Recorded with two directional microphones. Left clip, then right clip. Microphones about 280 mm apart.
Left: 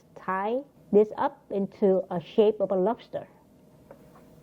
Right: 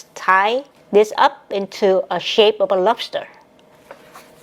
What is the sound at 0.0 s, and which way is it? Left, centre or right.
Speech, centre.